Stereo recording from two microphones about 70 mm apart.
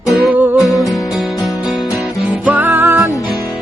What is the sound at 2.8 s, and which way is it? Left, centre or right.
Music, right.